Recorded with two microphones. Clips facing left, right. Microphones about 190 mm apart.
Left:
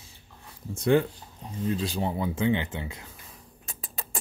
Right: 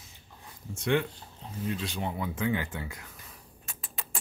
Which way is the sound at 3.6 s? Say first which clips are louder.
Left 3 dB; 35° left (ahead or behind).